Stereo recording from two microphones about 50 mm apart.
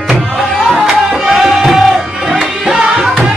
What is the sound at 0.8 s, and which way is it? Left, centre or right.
Music, centre.